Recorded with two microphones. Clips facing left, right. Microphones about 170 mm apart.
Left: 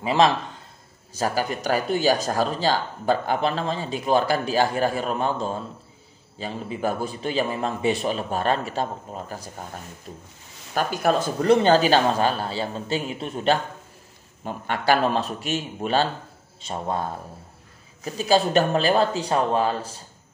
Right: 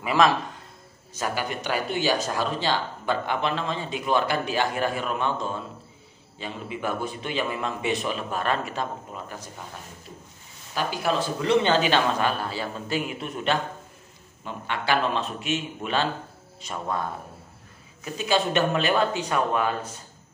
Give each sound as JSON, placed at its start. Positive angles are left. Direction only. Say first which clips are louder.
{"t": 0.0, "sound": "a man's voice", "louder": "left 2 dB", "side_deg": 30}
{"t": 10.7, "sound": "speech", "louder": "left 4 dB", "side_deg": 50}